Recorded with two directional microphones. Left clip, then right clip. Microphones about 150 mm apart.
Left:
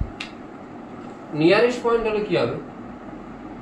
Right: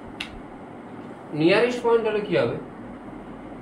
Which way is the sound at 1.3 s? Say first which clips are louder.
Left 2 dB; 25° right (ahead or behind).